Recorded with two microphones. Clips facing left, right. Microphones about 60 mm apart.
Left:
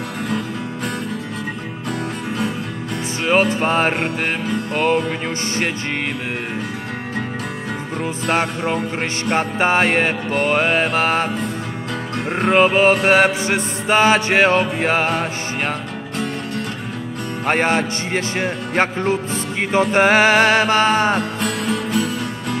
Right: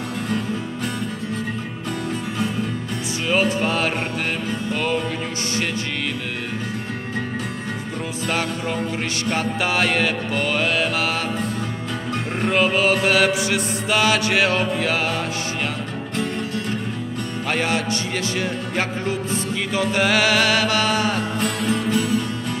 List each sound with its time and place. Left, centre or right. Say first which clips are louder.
1.9 s music: left 2 dB; left
3.3 s music: left 4 dB; left
4.0 s music: left 3 dB; left
8.0 s music: left 5 dB; left
12.3 s music: left 5 dB; left
17.5 s music: left 5 dB; left
21.2 s music: left 1 dB; left